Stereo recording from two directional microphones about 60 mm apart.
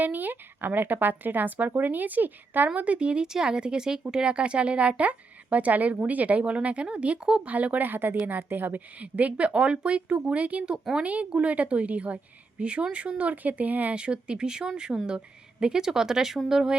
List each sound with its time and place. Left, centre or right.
0.0 s speech: right; by 7.4 s centre
7.4 s speech: right; by 16.7 s centre